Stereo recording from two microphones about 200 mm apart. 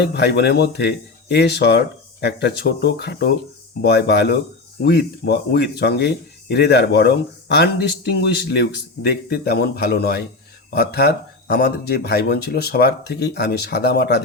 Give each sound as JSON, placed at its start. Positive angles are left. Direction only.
{"t": 0.0, "sound": "speech", "side_deg": 55}